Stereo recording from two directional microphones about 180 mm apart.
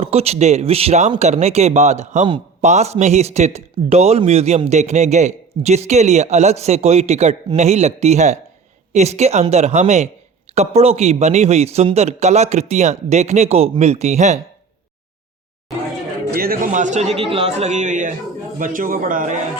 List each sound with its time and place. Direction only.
0.0 s a man's voice: 35° right (ahead or behind)
2.2 s speech: 25° right (ahead or behind)
2.6 s a man's voice: 35° right (ahead or behind)
16.3 s a man's voice: 55° right (ahead or behind)